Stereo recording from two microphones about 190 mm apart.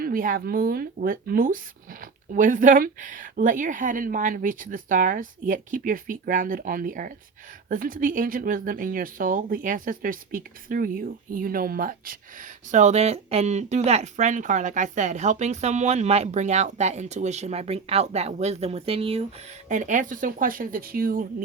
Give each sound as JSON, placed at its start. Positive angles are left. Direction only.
{"t": 0.0, "sound": "speech", "side_deg": -45}
{"t": 19.6, "sound": "speech", "side_deg": -40}